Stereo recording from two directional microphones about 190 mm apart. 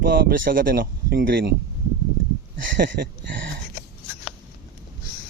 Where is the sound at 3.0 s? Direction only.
55° right (ahead or behind).